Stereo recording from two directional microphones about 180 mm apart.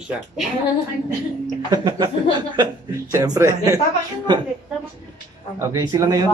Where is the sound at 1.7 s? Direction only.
25° right (ahead or behind).